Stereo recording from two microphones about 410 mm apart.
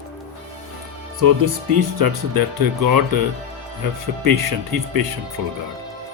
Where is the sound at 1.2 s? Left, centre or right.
Right.